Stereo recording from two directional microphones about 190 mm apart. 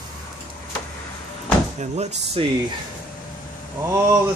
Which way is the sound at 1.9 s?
35° right (ahead or behind).